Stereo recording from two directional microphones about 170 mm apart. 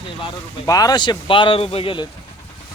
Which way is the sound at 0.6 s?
20° left (ahead or behind).